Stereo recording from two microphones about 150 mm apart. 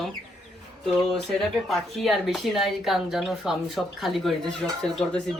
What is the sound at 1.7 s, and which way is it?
Speech, centre (ahead or behind).